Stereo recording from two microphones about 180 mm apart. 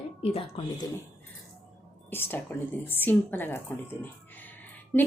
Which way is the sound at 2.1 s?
10° left (ahead or behind).